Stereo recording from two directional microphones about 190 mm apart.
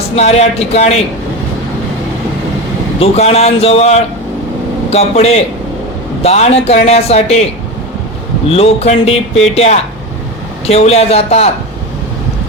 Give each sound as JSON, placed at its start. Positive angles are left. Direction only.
{"t": 0.2, "sound": "speech", "side_deg": 35}
{"t": 3.0, "sound": "speech", "side_deg": 35}
{"t": 8.4, "sound": "speech", "side_deg": 30}